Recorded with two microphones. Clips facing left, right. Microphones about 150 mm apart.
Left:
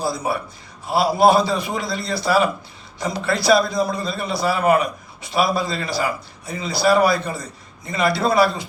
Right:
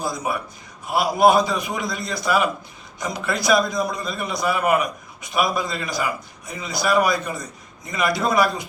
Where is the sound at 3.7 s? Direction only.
30° left (ahead or behind).